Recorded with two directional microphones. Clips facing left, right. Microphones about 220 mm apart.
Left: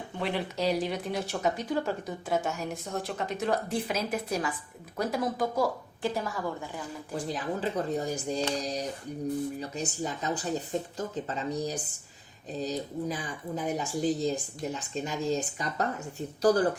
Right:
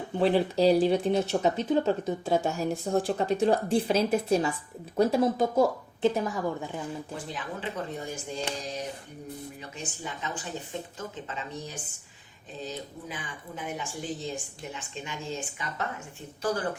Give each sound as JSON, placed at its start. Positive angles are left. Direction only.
{"t": 0.2, "sound": "a woman's voice", "side_deg": -35}
{"t": 7.3, "sound": "speech", "side_deg": 40}
{"t": 9.6, "sound": "speech", "side_deg": 40}